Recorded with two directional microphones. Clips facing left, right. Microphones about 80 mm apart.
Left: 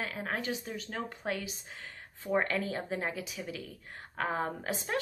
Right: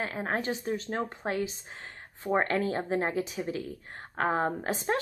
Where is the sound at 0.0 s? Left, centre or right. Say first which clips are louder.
Right 4 dB; right.